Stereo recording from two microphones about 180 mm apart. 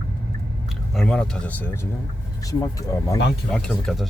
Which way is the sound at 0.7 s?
5° left (ahead or behind).